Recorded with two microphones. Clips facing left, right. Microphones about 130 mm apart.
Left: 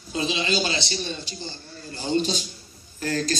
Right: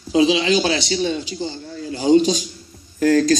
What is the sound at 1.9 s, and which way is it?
Speech, 90° right.